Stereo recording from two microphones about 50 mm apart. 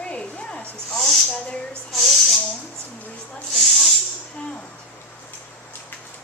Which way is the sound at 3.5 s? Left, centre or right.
Centre.